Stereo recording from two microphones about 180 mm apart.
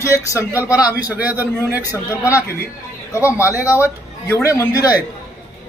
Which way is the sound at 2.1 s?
15° left (ahead or behind).